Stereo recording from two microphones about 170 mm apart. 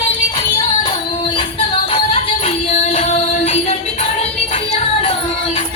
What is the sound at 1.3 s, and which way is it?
Music, 30° left (ahead or behind).